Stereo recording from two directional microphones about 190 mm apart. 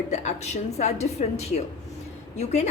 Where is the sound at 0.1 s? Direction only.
35° left (ahead or behind).